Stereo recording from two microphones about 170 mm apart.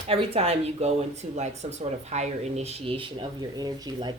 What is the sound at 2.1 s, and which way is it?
A woman's voice, 40° right (ahead or behind).